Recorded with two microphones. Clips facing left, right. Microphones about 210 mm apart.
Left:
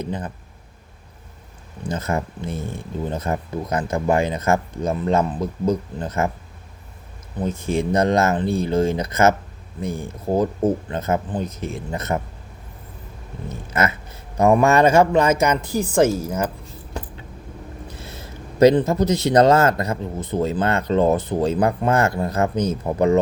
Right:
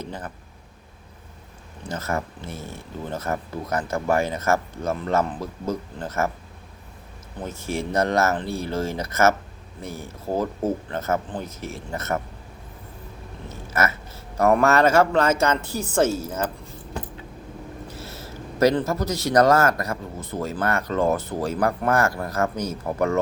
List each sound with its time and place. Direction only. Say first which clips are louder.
0.0 s speech: left 6 dB; 15° left (ahead or behind)
1.9 s speech: left 3 dB; 15° left (ahead or behind)
7.4 s speech: left 6 dB; 15° left (ahead or behind)
10.3 s speech: left 5 dB; 15° left (ahead or behind)
13.5 s speech: left 2 dB; 15° left (ahead or behind)
17.9 s speech: right 1 dB; 15° left (ahead or behind)